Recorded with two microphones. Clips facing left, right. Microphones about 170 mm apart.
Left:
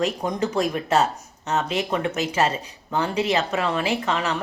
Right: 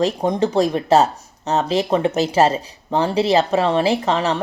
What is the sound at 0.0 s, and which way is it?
Speech, 30° right (ahead or behind).